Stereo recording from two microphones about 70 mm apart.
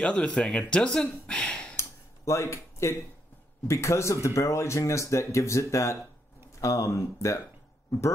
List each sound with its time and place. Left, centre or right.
0.0 s speech: centre
1.8 s a sound: left
3.6 s speech: left